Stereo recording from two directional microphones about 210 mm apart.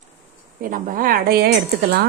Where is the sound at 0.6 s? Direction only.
40° right (ahead or behind).